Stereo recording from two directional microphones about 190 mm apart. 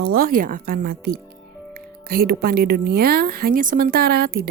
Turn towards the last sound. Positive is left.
turn(degrees=-50)  # may be behind; listen again after turning